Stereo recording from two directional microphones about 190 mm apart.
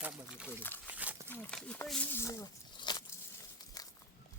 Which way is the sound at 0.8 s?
10° right (ahead or behind).